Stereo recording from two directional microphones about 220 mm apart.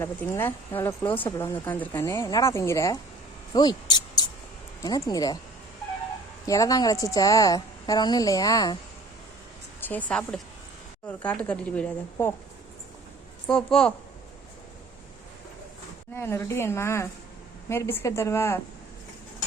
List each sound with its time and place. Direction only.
0.0 s a woman's voice: 10° left (ahead or behind)
6.4 s a woman's voice: 15° left (ahead or behind)
9.8 s a woman's voice: 5° left (ahead or behind)
13.5 s a woman's voice: 5° left (ahead or behind)
16.1 s a woman's voice: 10° left (ahead or behind)